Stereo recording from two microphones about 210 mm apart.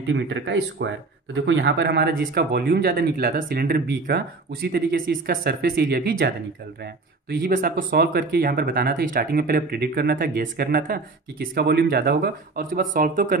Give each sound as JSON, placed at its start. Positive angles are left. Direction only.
{"t": 0.0, "sound": "speech", "side_deg": -55}